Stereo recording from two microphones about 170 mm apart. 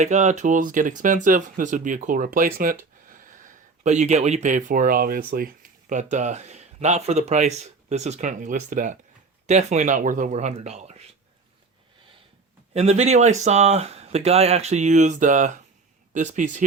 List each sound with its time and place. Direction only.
0.0 s speech: 45° right (ahead or behind)
12.7 s speech: 40° right (ahead or behind)